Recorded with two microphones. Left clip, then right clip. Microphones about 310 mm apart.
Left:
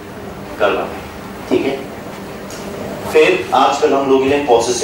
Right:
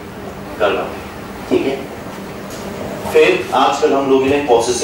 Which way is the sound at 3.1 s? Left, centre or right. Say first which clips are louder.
Even; centre.